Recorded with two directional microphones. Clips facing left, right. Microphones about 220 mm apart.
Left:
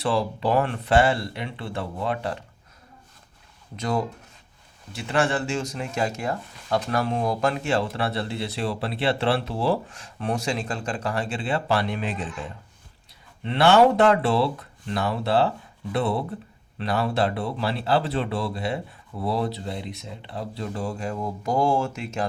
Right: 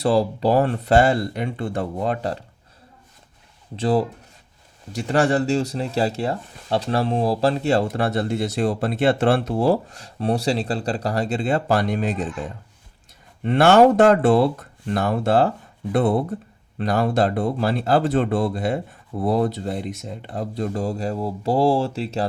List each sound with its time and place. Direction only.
0.0 s speech: 40° right (ahead or behind)
3.8 s speech: 30° right (ahead or behind)
13.4 s speech: 45° right (ahead or behind)